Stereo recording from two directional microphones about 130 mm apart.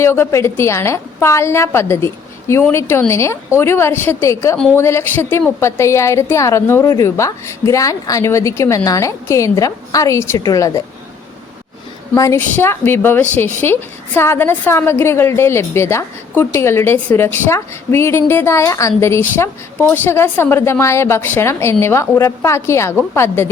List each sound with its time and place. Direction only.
0.0 s a woman's voice: 20° left (ahead or behind)
12.1 s a woman's voice: 20° left (ahead or behind)